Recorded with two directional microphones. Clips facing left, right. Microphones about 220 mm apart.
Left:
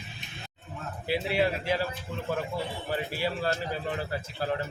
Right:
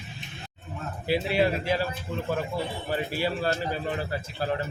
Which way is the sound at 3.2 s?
35° right (ahead or behind).